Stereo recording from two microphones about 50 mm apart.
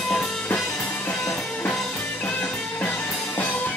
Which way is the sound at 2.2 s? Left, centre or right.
Left.